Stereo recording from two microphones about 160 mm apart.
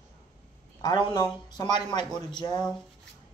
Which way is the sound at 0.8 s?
25° left (ahead or behind).